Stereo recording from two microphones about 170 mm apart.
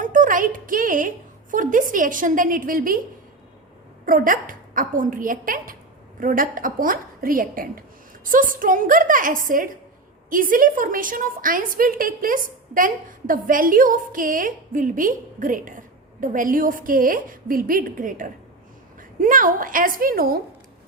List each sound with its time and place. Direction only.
0.0 s a woman's voice: 50° right (ahead or behind)
4.0 s a woman's voice: 55° right (ahead or behind)